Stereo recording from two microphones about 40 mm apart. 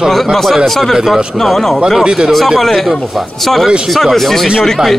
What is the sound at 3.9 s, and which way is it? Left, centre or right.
Speech, centre.